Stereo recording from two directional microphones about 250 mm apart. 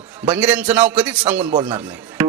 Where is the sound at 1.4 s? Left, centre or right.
Right.